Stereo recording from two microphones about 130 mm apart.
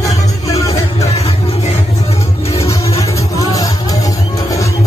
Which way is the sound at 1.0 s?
50° left (ahead or behind).